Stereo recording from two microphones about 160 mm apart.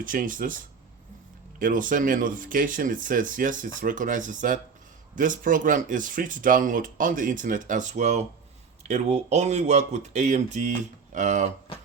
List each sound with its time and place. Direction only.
0.0 s speech: 60° right (ahead or behind)